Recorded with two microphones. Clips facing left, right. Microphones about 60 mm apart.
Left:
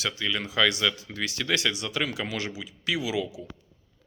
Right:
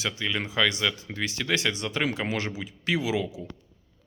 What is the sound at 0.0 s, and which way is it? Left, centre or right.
Speech, right.